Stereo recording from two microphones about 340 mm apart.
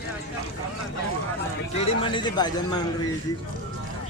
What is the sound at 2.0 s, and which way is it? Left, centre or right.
Speech, centre.